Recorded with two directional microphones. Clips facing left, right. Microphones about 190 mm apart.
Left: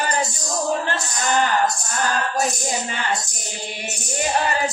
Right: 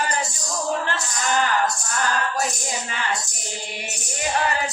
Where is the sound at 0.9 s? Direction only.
20° left (ahead or behind).